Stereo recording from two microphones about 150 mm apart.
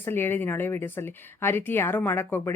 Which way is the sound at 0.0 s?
15° left (ahead or behind).